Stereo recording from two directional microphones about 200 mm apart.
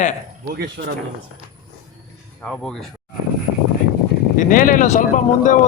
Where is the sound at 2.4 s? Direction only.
5° left (ahead or behind).